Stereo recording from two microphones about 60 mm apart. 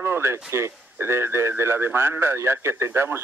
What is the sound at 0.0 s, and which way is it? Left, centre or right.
Speech, right.